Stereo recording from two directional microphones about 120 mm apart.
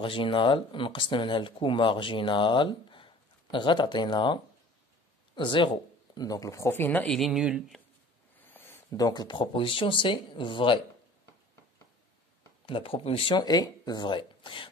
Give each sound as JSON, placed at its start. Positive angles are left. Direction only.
{"t": 0.0, "sound": "speech", "side_deg": 45}
{"t": 7.2, "sound": "speech", "side_deg": 0}
{"t": 8.5, "sound": "a sound", "side_deg": 15}
{"t": 8.9, "sound": "speech", "side_deg": 35}
{"t": 12.6, "sound": "speech", "side_deg": 45}